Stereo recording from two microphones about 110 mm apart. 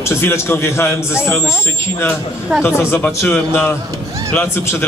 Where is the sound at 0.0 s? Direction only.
20° left (ahead or behind).